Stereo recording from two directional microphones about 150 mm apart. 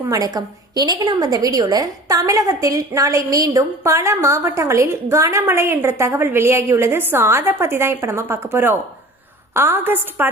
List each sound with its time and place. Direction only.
0.1 s a woman's voice: 25° right (ahead or behind)